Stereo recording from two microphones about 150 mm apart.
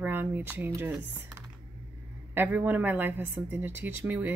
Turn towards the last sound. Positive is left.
turn(degrees=-10)  # may be behind; listen again after turning